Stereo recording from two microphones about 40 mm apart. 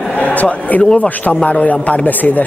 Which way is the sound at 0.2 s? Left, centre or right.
Left.